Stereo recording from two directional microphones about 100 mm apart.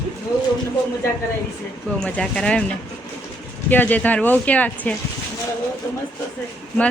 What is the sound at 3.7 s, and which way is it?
Speech, 15° left (ahead or behind).